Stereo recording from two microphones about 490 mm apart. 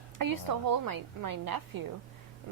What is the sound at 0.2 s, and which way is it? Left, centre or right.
A woman's voice, right.